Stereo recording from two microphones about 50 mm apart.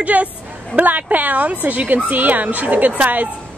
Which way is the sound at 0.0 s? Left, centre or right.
Right.